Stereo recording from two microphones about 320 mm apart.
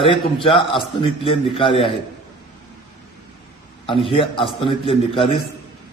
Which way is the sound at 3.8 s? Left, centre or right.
Centre.